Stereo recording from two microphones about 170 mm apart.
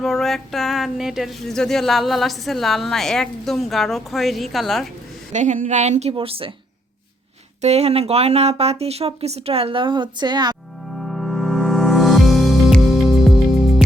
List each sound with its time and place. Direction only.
0.0 s a sound: centre (ahead or behind)
5.3 s a woman's voice: 45° right (ahead or behind)
7.6 s speech: 40° right (ahead or behind)
10.9 s music: centre (ahead or behind)